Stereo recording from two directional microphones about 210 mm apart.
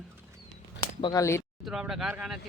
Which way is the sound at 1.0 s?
20° left (ahead or behind).